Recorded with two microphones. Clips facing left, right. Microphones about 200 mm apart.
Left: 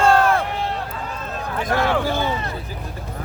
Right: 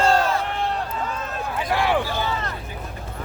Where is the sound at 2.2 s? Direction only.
20° left (ahead or behind).